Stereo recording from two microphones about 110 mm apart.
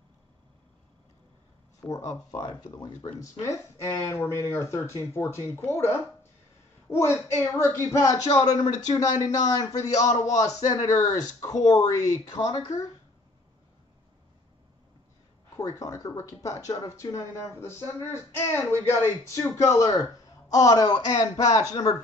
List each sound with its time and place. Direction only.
1.8 s speech: 30° left (ahead or behind)
2.4 s speech: 40° left (ahead or behind)
3.2 s a woman's voice: 25° left (ahead or behind)
15.5 s speech: 30° left (ahead or behind)